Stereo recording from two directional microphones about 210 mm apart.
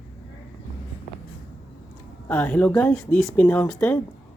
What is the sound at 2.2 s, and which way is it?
A woman's voice, 10° left (ahead or behind).